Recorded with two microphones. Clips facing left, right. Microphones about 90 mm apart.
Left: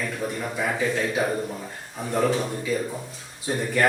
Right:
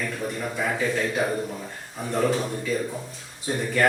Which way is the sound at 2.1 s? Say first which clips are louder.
Left 1 dB; 5° left (ahead or behind).